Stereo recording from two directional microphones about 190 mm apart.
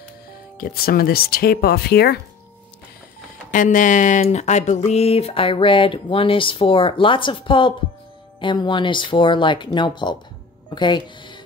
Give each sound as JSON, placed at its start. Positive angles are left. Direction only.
{"t": 0.6, "sound": "speech", "side_deg": 50}
{"t": 3.5, "sound": "speech", "side_deg": 45}